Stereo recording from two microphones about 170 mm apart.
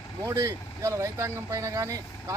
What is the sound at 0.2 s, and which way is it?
Speech, 20° right (ahead or behind).